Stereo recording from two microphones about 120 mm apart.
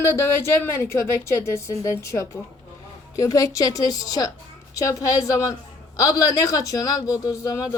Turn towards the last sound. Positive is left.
turn(degrees=25)  # may be behind; listen again after turning